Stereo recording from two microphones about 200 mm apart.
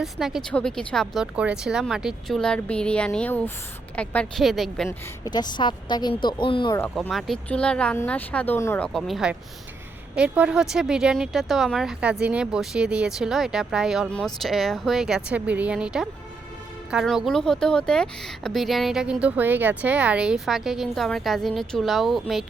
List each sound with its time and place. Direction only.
0.0 s speech: centre (ahead or behind)
4.9 s a woman's voice: 20° left (ahead or behind)
6.9 s speech: centre (ahead or behind)